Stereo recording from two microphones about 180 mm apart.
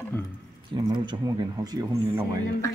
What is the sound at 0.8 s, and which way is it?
Stir, 20° right (ahead or behind).